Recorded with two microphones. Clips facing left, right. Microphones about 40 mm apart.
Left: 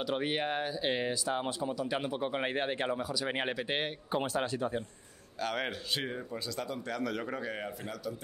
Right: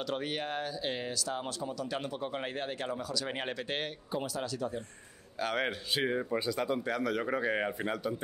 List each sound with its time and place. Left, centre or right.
0.0 s speech: centre
4.1 s speech: left
5.4 s a man's voice: centre
6.0 s speech: right
6.9 s a man's voice: centre
7.5 s a man's voice: right